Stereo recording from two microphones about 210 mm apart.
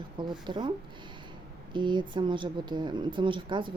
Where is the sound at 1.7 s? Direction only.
20° right (ahead or behind).